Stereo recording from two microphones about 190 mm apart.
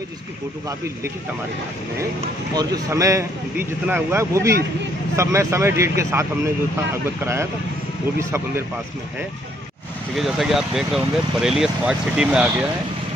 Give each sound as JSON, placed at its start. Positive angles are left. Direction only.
{"t": 2.5, "sound": "speech", "side_deg": -20}
{"t": 10.1, "sound": "speech", "side_deg": 0}